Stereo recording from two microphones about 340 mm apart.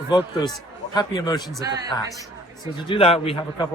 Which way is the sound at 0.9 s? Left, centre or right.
Centre.